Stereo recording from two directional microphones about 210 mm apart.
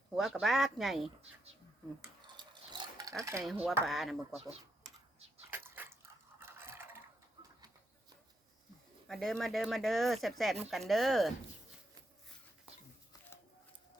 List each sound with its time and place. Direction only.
0.2 s speech: centre (ahead or behind)
2.2 s a sound: 20° right (ahead or behind)
3.4 s speech: centre (ahead or behind)
5.5 s dog: 10° right (ahead or behind)
9.0 s speech: centre (ahead or behind)